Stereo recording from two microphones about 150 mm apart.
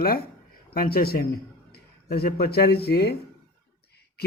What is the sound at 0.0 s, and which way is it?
A man's voice, 85° left.